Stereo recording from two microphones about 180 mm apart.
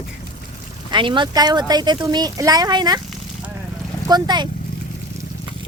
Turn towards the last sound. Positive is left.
turn(degrees=-25)  # may be behind; listen again after turning